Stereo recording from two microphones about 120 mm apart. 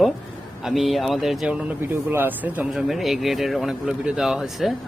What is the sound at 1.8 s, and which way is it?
Speech, 20° right (ahead or behind).